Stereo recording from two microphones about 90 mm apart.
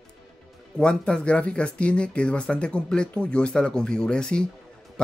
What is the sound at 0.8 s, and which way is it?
Speech, 10° left (ahead or behind).